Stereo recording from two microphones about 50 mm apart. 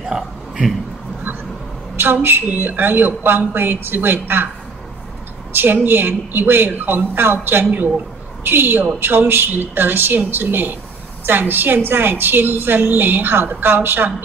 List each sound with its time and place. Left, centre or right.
2.2 s a woman's voice: right
5.5 s a woman's voice: right